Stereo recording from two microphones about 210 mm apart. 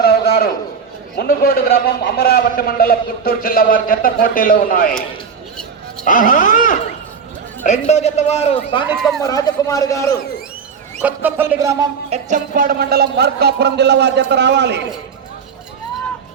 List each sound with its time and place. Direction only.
0.0 s a sound: 50° left (ahead or behind)
1.2 s a man's voice: 45° left (ahead or behind)
6.1 s a man's voice: 40° left (ahead or behind)
7.9 s a man's voice: 30° left (ahead or behind)
9.2 s speech: 15° left (ahead or behind)
11.0 s music: 10° right (ahead or behind)
12.1 s speech: 40° right (ahead or behind); by 14.8 s 55° right (ahead or behind)